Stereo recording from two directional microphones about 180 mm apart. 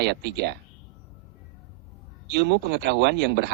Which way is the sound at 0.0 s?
70° right (ahead or behind).